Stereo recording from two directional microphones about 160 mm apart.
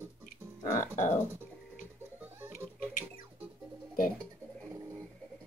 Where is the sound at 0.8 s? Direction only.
50° left (ahead or behind).